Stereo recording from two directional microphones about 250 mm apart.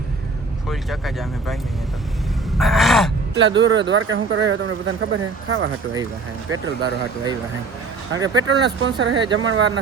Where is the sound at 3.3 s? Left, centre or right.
Right.